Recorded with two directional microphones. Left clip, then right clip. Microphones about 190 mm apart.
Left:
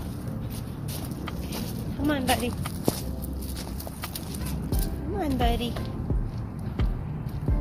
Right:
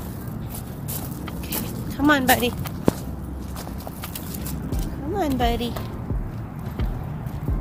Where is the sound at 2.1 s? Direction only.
30° right (ahead or behind).